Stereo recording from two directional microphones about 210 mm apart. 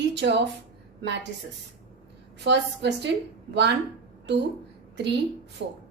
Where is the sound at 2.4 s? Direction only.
55° right (ahead or behind).